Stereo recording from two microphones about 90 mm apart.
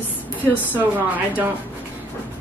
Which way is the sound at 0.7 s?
20° right (ahead or behind).